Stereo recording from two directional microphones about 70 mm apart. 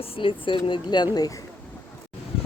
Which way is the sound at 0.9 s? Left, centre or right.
Left.